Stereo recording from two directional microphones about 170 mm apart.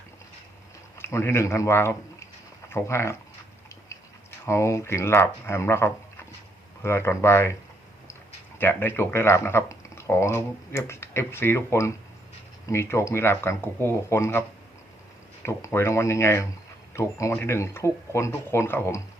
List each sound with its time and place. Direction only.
0.9 s speech: 15° left (ahead or behind)
8.5 s speech: 10° left (ahead or behind)
15.4 s speech: 15° left (ahead or behind)